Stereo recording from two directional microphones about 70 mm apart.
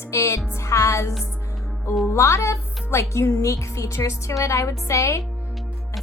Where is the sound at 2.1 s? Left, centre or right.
Left.